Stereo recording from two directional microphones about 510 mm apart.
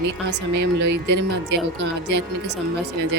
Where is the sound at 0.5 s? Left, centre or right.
Right.